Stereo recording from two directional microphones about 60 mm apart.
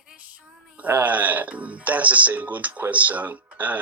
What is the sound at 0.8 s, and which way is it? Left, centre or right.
Speech, right.